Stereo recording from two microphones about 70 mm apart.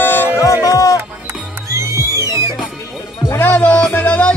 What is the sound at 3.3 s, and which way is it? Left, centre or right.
Music, left.